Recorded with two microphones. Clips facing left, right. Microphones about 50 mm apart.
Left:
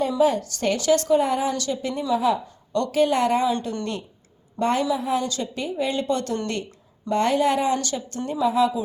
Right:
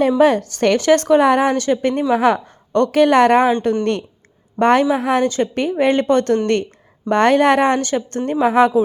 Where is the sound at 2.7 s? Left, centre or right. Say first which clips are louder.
Right 8 dB; right.